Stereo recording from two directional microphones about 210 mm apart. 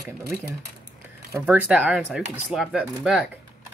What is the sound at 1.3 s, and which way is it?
Speech, 10° right (ahead or behind).